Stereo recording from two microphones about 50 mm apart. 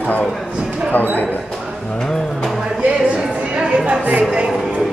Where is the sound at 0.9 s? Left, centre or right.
Left.